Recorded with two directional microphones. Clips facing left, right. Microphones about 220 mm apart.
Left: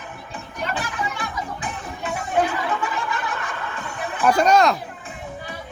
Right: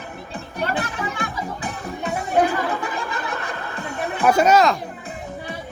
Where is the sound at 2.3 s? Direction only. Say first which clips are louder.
Right 2 dB; 35° right (ahead or behind).